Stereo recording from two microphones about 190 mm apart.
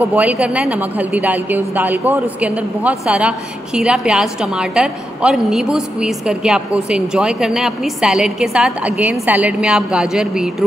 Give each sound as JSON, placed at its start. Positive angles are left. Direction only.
{"t": 0.1, "sound": "a man's voice", "side_deg": -5}